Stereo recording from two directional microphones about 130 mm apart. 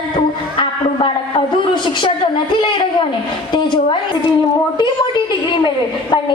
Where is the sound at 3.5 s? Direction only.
40° left (ahead or behind).